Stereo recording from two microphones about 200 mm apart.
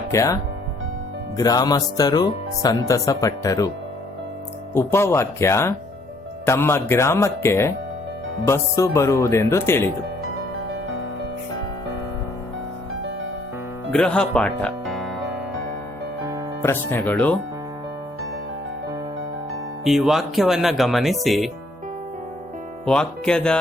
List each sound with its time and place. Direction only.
0.1 s speech: 15° left (ahead or behind)
1.4 s speech: 20° left (ahead or behind)
4.7 s speech: 10° left (ahead or behind)
13.9 s speech: 5° left (ahead or behind)
16.6 s speech: 10° left (ahead or behind)
19.8 s speech: centre (ahead or behind)
22.9 s speech: 5° left (ahead or behind)